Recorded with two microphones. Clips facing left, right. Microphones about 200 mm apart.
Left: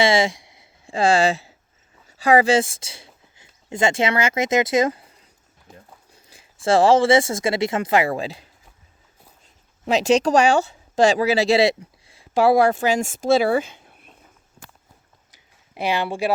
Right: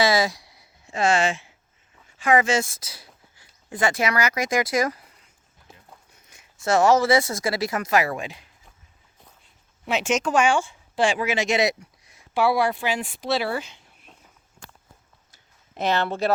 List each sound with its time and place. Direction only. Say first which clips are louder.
0.0 s speech: left 3 dB; 25° left (ahead or behind)
6.1 s speech: left 4 dB; 30° left (ahead or behind)
9.8 s speech: left 6 dB; 40° left (ahead or behind)
12.3 s speech: left 5 dB; 45° left (ahead or behind)
15.3 s a sound: left 1 dB; 10° left (ahead or behind)